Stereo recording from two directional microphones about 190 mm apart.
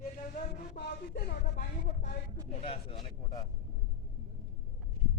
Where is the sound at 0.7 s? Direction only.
60° left (ahead or behind).